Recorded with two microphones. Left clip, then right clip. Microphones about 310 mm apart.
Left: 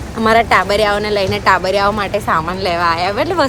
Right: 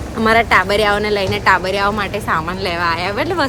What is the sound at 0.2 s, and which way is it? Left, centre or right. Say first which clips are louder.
Speech: left 1 dB; centre.